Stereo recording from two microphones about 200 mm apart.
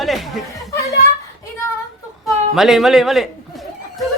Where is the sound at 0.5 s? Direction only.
15° left (ahead or behind).